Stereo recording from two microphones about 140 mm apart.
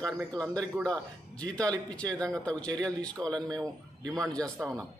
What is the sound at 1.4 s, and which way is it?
A man's voice, 10° left (ahead or behind).